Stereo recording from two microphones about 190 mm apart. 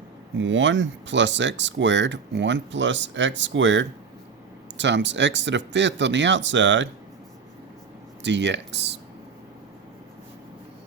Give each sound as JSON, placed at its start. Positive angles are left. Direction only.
{"t": 0.3, "sound": "speech", "side_deg": -75}
{"t": 8.2, "sound": "speech", "side_deg": -70}